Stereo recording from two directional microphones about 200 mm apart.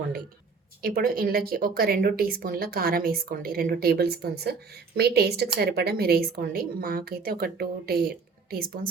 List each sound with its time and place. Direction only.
0.8 s speech: 50° right (ahead or behind)